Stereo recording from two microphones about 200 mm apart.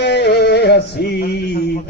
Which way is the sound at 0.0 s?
55° left (ahead or behind).